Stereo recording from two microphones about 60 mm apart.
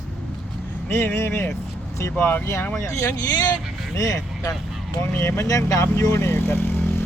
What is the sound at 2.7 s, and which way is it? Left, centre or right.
Speech, left.